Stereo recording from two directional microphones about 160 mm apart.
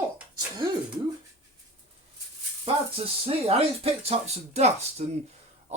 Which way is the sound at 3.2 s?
40° right (ahead or behind).